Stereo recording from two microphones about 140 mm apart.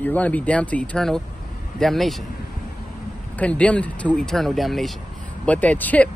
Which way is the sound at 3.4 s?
10° left (ahead or behind).